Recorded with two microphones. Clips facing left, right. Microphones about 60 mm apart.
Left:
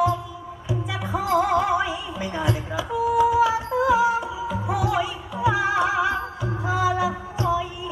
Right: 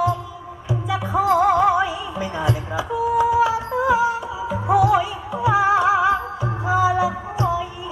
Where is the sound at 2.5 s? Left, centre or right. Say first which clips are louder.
Right 2 dB; right.